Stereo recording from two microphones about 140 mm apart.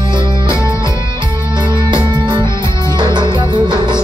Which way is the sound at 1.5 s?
35° right (ahead or behind).